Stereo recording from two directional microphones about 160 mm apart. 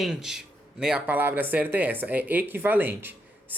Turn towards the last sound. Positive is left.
turn(degrees=-10)  # may be behind; listen again after turning